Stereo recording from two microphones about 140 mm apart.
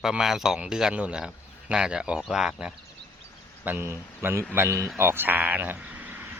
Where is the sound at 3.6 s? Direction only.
15° right (ahead or behind).